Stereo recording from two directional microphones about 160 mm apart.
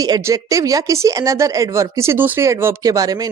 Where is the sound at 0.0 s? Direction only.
20° right (ahead or behind).